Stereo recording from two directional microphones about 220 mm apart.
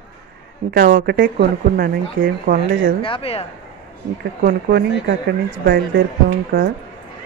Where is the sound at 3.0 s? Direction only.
25° left (ahead or behind).